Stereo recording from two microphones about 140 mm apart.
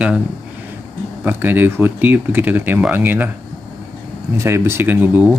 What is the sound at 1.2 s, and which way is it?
Speech, 15° right (ahead or behind).